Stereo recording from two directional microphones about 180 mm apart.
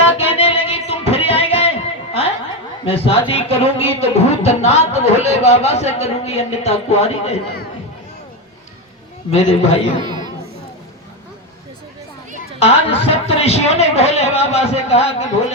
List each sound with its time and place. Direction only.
0.0 s music: 35° left (ahead or behind)
2.8 s a man's voice: 30° left (ahead or behind)
9.3 s a man's voice: 40° left (ahead or behind)
10.0 s chatter: 25° right (ahead or behind)
12.5 s a man's voice: 35° left (ahead or behind)